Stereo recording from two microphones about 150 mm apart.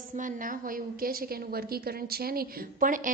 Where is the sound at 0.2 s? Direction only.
65° right (ahead or behind).